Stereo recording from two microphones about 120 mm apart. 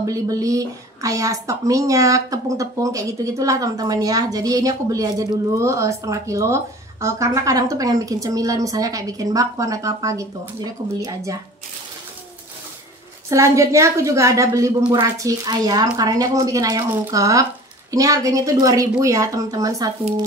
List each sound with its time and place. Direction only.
0.0 s a woman's voice: 30° right (ahead or behind)
13.3 s a woman's voice: 25° right (ahead or behind)